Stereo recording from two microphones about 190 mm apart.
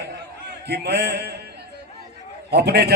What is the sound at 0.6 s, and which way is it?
Speech, 60° right (ahead or behind).